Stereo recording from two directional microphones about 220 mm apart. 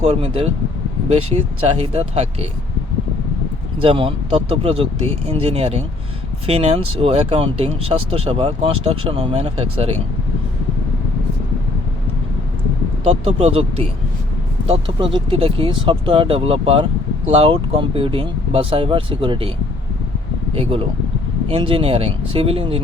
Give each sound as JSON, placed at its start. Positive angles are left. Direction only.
{"t": 0.0, "sound": "speech", "side_deg": -25}
{"t": 3.8, "sound": "speech", "side_deg": -25}
{"t": 13.1, "sound": "speech", "side_deg": -30}
{"t": 20.6, "sound": "speech", "side_deg": -25}